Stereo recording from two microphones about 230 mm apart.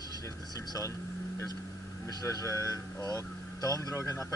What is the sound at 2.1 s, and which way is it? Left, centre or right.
Speech, centre.